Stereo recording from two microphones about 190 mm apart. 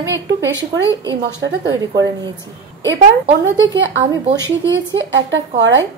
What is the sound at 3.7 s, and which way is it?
Speech, 70° right (ahead or behind).